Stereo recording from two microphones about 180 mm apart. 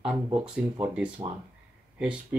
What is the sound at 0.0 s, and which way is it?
Speech, 5° right (ahead or behind).